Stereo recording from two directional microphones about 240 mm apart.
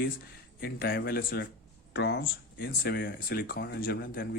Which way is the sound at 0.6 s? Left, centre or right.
Left.